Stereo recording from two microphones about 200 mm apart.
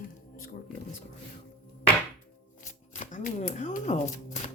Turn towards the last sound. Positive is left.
turn(degrees=35)  # may be behind; listen again after turning